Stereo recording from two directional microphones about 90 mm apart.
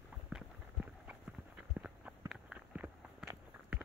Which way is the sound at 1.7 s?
20° right (ahead or behind).